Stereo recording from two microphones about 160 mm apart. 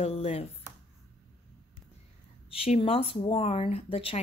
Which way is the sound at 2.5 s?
35° left (ahead or behind).